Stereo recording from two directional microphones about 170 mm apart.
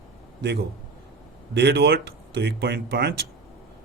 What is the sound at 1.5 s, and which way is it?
Speech, 85° right.